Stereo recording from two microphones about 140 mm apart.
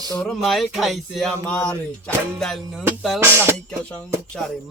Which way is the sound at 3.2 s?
15° right (ahead or behind).